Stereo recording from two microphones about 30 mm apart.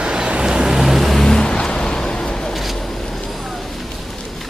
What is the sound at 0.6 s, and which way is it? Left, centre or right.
Vehicle, centre.